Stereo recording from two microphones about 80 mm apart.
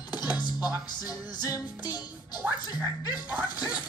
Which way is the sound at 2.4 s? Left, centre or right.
Centre.